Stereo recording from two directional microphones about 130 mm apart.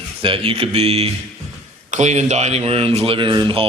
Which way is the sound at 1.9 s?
60° right (ahead or behind).